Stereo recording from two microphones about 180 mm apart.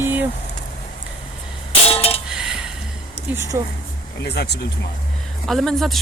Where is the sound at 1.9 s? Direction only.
35° left (ahead or behind).